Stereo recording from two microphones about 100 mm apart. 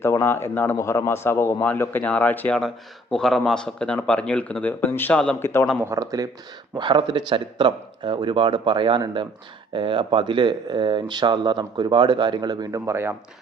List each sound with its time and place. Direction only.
0.0 s a man's voice: 25° left (ahead or behind)
2.6 s a man's voice: 5° left (ahead or behind); by 5.6 s 25° left (ahead or behind)
5.8 s speech: 30° right (ahead or behind)
6.7 s speech: 50° right (ahead or behind)
12.8 s speech: 25° right (ahead or behind)